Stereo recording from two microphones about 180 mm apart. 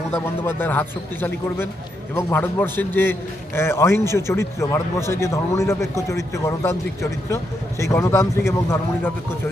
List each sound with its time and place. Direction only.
0.1 s speech: 10° left (ahead or behind)